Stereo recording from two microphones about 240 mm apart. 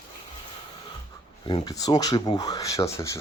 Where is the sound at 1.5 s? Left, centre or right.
Centre.